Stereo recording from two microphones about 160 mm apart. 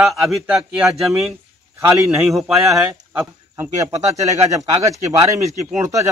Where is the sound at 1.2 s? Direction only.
15° right (ahead or behind).